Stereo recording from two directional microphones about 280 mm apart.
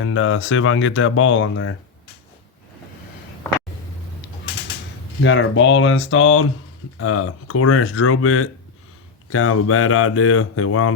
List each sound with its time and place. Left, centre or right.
0.0 s speech: left
5.2 s speech: left